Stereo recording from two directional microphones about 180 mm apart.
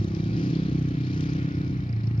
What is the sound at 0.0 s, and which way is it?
Vehicle, 30° left (ahead or behind).